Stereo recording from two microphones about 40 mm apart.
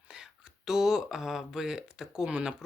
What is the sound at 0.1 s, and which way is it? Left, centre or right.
Speech, centre.